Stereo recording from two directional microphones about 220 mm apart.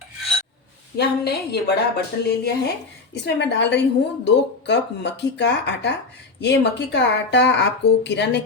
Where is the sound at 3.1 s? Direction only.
50° left (ahead or behind).